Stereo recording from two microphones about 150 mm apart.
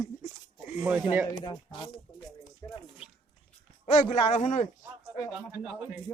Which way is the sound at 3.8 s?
35° left (ahead or behind).